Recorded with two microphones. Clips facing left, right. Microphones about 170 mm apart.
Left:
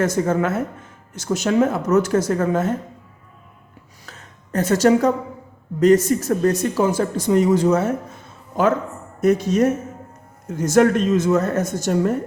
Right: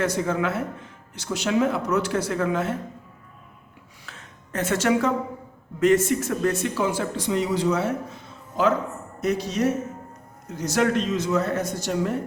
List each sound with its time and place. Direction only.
0.0 s speech: 45° left (ahead or behind)
4.0 s a sound: 40° left (ahead or behind)
5.8 s speech: 40° left (ahead or behind)